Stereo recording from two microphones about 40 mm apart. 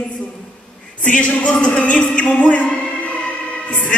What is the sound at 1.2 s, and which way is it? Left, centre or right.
Music, left.